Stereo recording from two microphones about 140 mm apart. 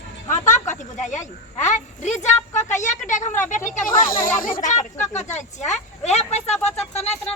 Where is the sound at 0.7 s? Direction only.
60° left (ahead or behind).